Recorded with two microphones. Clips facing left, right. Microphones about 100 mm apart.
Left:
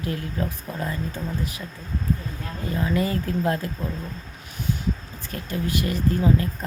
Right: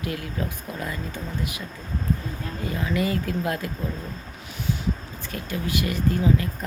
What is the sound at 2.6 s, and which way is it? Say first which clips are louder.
Speech: left 1 dB; 35° left (ahead or behind).